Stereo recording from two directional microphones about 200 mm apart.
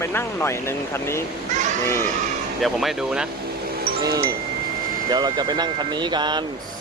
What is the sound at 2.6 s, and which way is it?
Speech, centre (ahead or behind).